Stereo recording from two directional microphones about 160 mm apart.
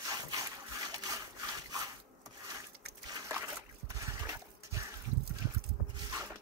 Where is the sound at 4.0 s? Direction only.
20° right (ahead or behind).